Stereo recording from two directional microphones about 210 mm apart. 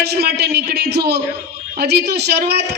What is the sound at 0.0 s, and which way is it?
A woman's voice, 50° right (ahead or behind).